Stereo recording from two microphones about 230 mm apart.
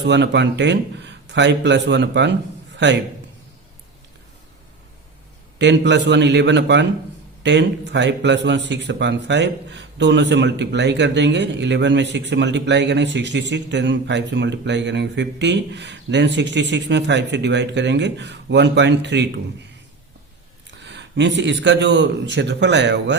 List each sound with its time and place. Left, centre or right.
0.0 s a man's voice: right
5.5 s speech: right
20.7 s speech: right